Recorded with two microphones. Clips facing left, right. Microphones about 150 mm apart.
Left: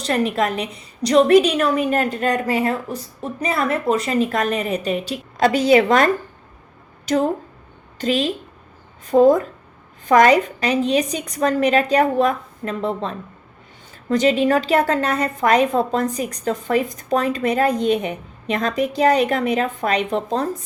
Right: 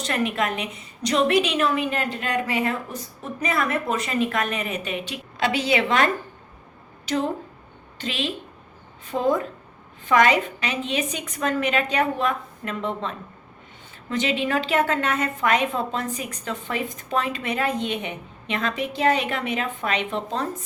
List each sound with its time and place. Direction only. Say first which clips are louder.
0.0 s a woman's voice: left 5 dB; 35° left (ahead or behind)